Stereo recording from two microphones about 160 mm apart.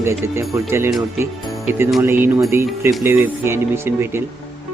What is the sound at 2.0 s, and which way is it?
Speech, 15° right (ahead or behind).